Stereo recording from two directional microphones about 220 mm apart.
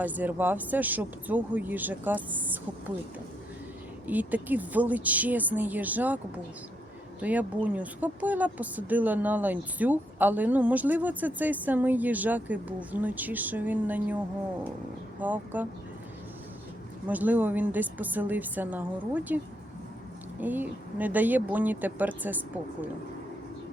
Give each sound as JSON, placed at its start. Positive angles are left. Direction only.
{"t": 0.0, "sound": "speech", "side_deg": -5}
{"t": 4.0, "sound": "speech", "side_deg": -5}
{"t": 7.2, "sound": "speech", "side_deg": -5}
{"t": 15.2, "sound": "speech", "side_deg": -5}
{"t": 17.1, "sound": "speech", "side_deg": -5}
{"t": 20.4, "sound": "speech", "side_deg": -10}